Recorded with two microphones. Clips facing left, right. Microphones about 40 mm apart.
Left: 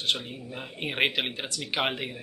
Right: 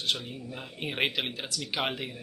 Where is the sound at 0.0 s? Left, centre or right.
Centre.